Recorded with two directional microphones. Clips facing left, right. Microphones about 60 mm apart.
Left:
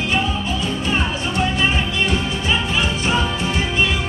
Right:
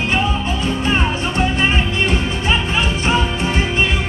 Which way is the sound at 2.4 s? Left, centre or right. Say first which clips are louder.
Right 2 dB; right.